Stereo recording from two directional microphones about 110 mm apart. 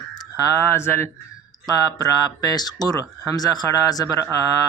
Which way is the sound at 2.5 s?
35° left (ahead or behind).